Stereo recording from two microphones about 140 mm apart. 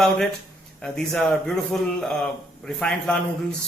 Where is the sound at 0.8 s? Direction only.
5° left (ahead or behind).